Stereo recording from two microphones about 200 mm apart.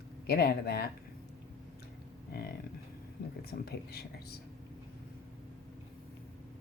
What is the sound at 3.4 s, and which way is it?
Speech, 50° left (ahead or behind).